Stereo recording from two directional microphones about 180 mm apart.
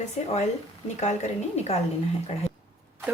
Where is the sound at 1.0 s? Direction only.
40° left (ahead or behind).